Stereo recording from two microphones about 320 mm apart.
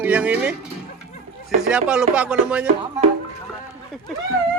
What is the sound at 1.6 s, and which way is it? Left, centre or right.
Speech, centre.